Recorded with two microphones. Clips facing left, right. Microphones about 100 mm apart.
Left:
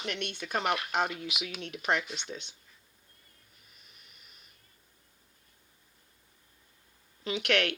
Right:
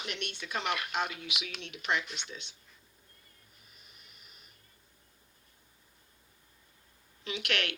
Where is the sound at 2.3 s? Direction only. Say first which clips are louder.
Left 5 dB; 40° left (ahead or behind).